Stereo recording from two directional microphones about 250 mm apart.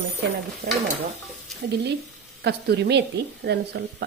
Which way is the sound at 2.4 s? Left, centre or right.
Right.